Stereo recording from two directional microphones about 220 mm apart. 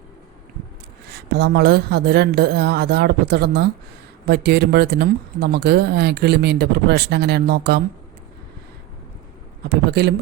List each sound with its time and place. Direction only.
1.4 s speech: 45° right (ahead or behind)
9.6 s speech: 45° right (ahead or behind)